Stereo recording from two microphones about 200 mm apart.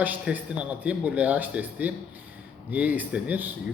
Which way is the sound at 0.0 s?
10° right (ahead or behind).